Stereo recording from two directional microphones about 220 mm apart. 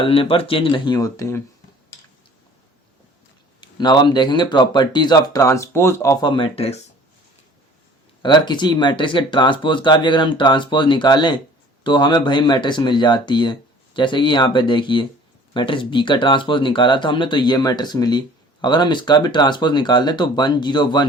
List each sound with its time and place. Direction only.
0.0 s speech: 25° left (ahead or behind)
3.6 s speech: 20° left (ahead or behind)
8.2 s speech: 20° left (ahead or behind)